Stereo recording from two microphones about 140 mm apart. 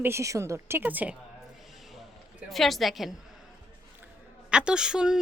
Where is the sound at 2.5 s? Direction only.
Centre (ahead or behind).